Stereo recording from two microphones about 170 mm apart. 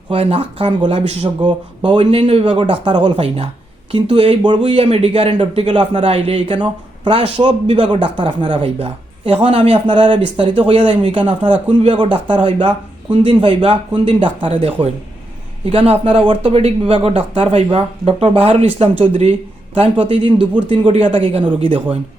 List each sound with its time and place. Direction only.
0.1 s speech: 35° right (ahead or behind)
0.9 s speech: 40° right (ahead or behind)
1.4 s speech: 25° right (ahead or behind)
3.0 s speech: 40° right (ahead or behind)
20.4 s speech: 10° right (ahead or behind)
20.7 s speech: 30° right (ahead or behind)